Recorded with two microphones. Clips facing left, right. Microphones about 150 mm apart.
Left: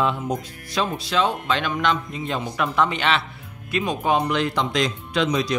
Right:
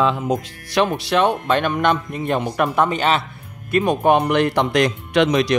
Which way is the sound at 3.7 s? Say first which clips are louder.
Right 6 dB; 60° right (ahead or behind).